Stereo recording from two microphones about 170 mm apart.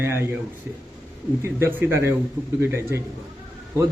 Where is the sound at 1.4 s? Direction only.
15° right (ahead or behind).